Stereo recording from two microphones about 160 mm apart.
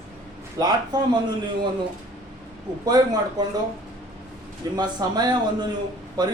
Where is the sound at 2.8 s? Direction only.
25° right (ahead or behind).